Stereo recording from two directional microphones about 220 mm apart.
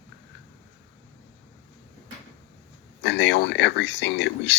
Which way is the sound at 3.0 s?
50° left (ahead or behind).